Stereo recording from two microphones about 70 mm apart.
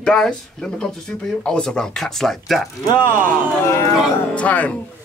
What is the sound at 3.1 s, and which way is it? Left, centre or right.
Speech, right.